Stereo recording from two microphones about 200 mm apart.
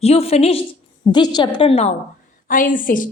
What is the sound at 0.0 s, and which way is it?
A woman's voice, 30° left (ahead or behind).